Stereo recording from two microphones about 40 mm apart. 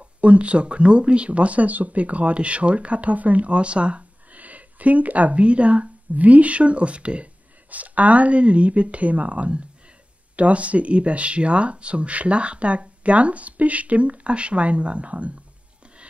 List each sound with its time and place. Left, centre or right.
0.2 s speech: right